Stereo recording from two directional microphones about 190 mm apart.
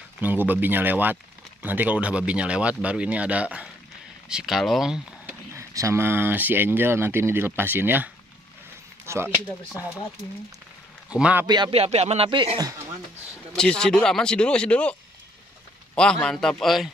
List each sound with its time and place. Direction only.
0.2 s speech: 10° right (ahead or behind)
5.5 s speech: 15° right (ahead or behind)
11.1 s speech: 5° right (ahead or behind)
11.4 s speech: 25° right (ahead or behind)
13.6 s speech: 5° left (ahead or behind)